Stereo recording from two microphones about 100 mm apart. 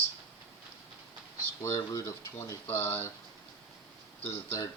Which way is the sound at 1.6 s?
30° left (ahead or behind).